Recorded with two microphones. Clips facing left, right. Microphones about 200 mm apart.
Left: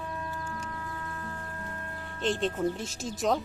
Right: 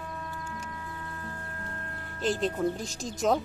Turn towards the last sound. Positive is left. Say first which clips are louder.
# right 2 dB
turn(degrees=0)  # may be behind; listen again after turning